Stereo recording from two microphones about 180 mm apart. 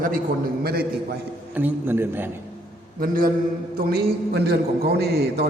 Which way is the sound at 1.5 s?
10° right (ahead or behind).